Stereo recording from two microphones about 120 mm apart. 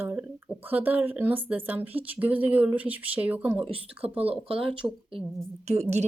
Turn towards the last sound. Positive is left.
turn(degrees=-65)  # may be behind; listen again after turning